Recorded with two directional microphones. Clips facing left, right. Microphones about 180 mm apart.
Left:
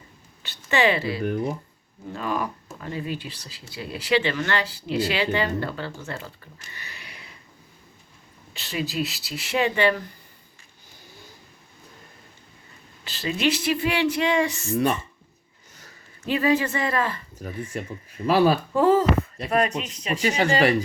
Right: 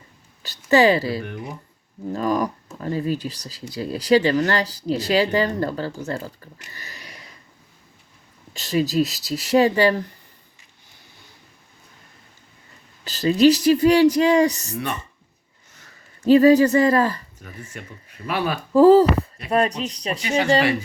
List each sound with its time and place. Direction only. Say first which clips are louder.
0.4 s speech: right 6 dB; 40° right (ahead or behind)
1.2 s speech: left 7 dB; 35° left (ahead or behind)
2.1 s speech: right 6 dB; 40° right (ahead or behind)
8.5 s speech: right 8 dB; 40° right (ahead or behind)
13.1 s speech: right 9 dB; 40° right (ahead or behind)
16.2 s speech: right 9 dB; 40° right (ahead or behind)
17.3 s speech: left 7 dB; 35° left (ahead or behind)
18.7 s speech: right 7 dB; 35° right (ahead or behind)